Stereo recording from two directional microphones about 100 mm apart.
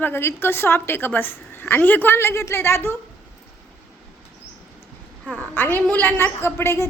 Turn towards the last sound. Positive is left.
turn(degrees=25)  # may be behind; listen again after turning